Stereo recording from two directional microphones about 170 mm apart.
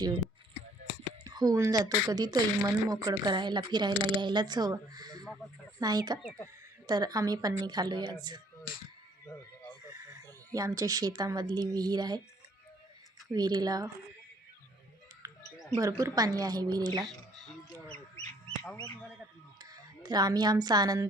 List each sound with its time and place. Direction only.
1.2 s speech: 25° right (ahead or behind)
5.4 s a sound: centre (ahead or behind)
5.8 s speech: 25° right (ahead or behind)
9.9 s speech: 20° right (ahead or behind)
13.3 s speech: 25° right (ahead or behind)
15.2 s music: 20° right (ahead or behind)
15.8 s speech: 20° right (ahead or behind)
17.0 s speech: centre (ahead or behind)
18.6 s speech: 5° left (ahead or behind)
19.7 s speech: 25° right (ahead or behind)